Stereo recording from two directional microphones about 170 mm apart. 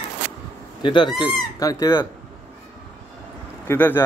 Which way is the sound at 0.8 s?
30° left (ahead or behind).